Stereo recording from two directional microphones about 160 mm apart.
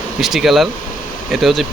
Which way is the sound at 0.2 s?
Centre (ahead or behind).